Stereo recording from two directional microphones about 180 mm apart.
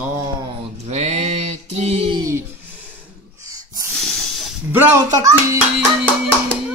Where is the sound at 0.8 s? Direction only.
35° right (ahead or behind).